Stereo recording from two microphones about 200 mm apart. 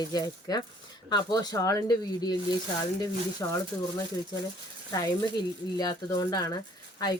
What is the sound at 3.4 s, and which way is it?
Speech, 15° left (ahead or behind).